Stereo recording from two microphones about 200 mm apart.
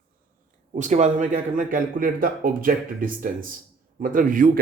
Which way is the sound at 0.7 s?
35° right (ahead or behind).